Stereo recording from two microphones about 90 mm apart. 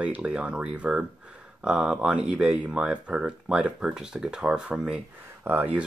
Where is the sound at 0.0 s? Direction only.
10° right (ahead or behind).